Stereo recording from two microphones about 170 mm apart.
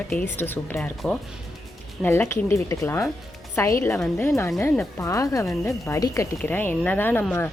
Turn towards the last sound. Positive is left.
turn(degrees=10)  # may be behind; listen again after turning